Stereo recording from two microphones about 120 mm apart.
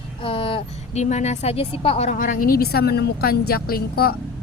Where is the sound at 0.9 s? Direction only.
70° left (ahead or behind); by 2.4 s 90° left.